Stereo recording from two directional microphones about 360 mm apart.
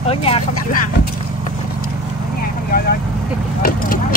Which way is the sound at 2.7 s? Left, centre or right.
Left.